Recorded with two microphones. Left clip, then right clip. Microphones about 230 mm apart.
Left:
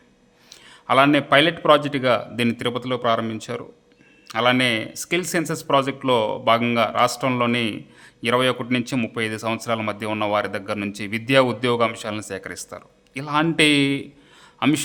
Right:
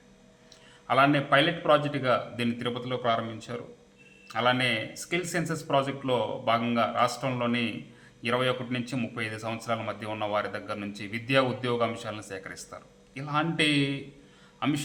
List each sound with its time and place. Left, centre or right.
0.5 s a man's voice: left